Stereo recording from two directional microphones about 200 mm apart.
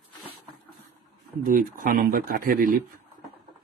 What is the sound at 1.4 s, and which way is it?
Speech, 45° right (ahead or behind).